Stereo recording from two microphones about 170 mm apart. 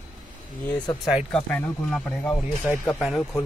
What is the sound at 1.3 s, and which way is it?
A man's voice, 5° left (ahead or behind).